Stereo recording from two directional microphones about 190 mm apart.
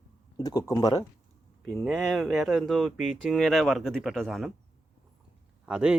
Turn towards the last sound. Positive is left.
turn(degrees=-5)  # may be behind; listen again after turning